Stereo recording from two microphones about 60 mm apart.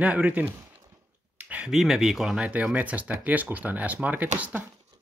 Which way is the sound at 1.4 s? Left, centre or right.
Right.